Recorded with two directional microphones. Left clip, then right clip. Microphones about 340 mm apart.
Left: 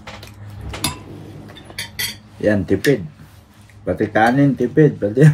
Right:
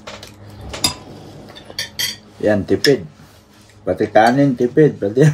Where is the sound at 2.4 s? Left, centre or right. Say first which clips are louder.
Right 1 dB; right.